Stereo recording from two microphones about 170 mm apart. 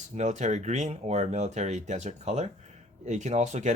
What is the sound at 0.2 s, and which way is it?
Speech, 45° right (ahead or behind).